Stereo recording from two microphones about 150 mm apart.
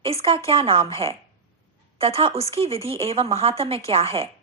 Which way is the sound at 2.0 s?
40° right (ahead or behind).